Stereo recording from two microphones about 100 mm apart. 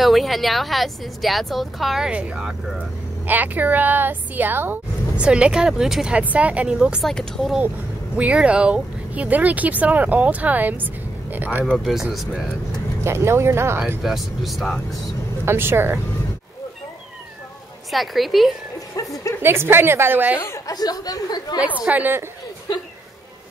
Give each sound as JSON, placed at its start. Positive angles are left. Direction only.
{"t": 0.0, "sound": "a woman's voice", "side_deg": 0}
{"t": 5.2, "sound": "speech", "side_deg": -10}
{"t": 8.2, "sound": "speech", "side_deg": -10}
{"t": 11.6, "sound": "speech", "side_deg": 0}
{"t": 13.0, "sound": "a woman's voice", "side_deg": -25}
{"t": 14.0, "sound": "speech", "side_deg": 0}
{"t": 15.4, "sound": "a woman's voice", "side_deg": -25}
{"t": 17.9, "sound": "speech", "side_deg": 0}
{"t": 19.4, "sound": "a woman's voice", "side_deg": -25}
{"t": 20.6, "sound": "speech", "side_deg": 40}
{"t": 21.8, "sound": "speech", "side_deg": -15}